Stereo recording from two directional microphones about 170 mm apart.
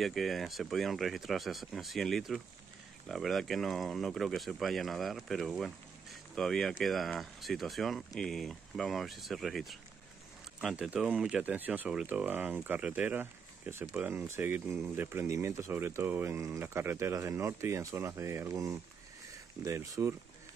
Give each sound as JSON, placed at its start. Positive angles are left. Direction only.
{"t": 0.0, "sound": "speech", "side_deg": 0}